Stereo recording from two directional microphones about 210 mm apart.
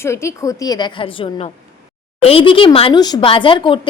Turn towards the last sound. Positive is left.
turn(degrees=25)  # may be behind; listen again after turning